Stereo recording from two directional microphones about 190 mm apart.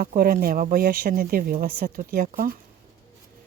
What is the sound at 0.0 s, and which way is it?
Speech, 50° right (ahead or behind).